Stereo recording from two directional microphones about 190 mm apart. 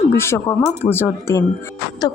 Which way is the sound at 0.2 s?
15° left (ahead or behind).